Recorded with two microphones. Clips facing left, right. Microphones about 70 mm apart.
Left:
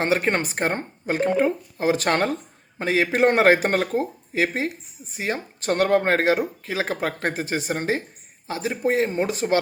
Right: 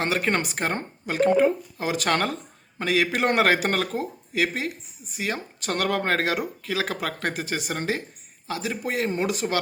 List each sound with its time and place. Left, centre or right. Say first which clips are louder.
0.0 s speech: left 3 dB; left